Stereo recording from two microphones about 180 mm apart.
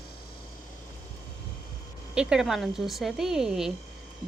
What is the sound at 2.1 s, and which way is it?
Speech, 5° right (ahead or behind).